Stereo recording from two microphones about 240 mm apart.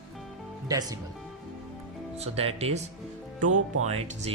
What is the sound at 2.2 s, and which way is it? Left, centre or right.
Speech, right.